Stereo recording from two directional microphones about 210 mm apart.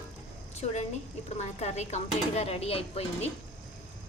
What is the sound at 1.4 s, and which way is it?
A woman's voice, 30° left (ahead or behind).